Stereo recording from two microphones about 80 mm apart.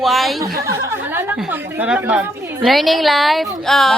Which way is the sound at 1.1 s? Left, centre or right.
Right.